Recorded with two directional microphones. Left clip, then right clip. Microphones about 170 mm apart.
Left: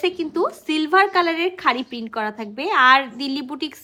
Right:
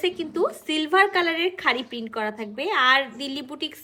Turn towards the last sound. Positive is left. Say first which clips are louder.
# left 4 dB
turn(degrees=25)  # may be behind; listen again after turning